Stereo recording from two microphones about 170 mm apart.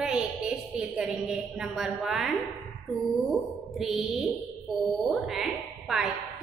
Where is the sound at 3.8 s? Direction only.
Centre (ahead or behind).